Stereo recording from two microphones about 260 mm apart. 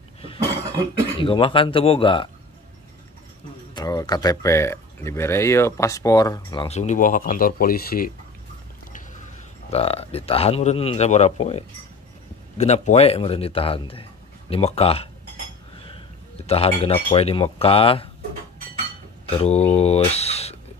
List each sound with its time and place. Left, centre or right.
1.2 s speech: centre
3.7 s speech: centre; by 8.1 s left
9.7 s speech: left
16.4 s speech: left
19.2 s speech: left